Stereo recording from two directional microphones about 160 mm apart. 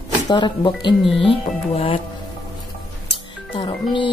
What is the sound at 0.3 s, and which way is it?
Speech, 25° left (ahead or behind).